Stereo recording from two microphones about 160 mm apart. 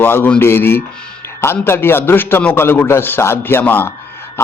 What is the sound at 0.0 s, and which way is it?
Speech, 15° left (ahead or behind).